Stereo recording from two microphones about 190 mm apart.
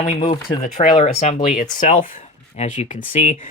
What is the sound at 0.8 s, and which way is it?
Speech, 40° left (ahead or behind).